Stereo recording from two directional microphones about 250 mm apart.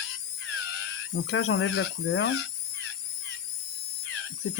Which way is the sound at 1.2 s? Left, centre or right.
Left.